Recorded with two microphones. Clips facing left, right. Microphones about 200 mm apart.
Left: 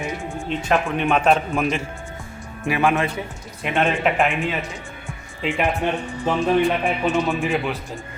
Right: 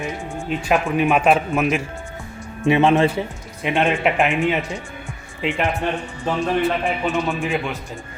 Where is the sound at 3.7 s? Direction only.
Centre (ahead or behind).